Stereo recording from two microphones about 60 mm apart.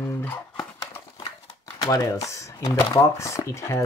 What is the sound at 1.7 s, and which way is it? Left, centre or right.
Speech, left.